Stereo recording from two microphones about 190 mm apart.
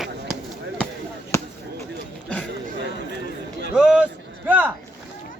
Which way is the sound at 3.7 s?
5° right (ahead or behind).